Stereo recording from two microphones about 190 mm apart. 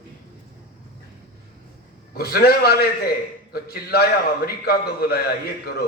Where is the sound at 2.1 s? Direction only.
55° left (ahead or behind).